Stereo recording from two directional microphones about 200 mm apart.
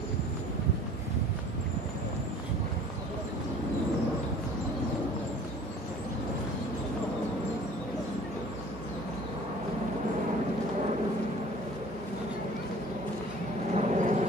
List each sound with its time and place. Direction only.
13.7 s vehicle: 35° right (ahead or behind)